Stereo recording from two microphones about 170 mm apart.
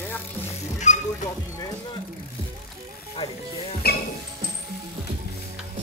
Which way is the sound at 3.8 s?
65° left (ahead or behind).